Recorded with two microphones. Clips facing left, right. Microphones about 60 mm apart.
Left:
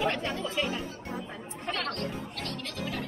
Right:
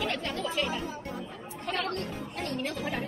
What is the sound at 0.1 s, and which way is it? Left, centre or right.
Chatter, centre.